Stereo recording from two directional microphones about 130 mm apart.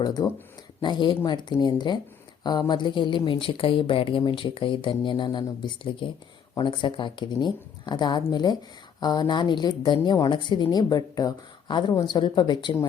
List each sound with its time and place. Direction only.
0.0 s speech: 30° left (ahead or behind)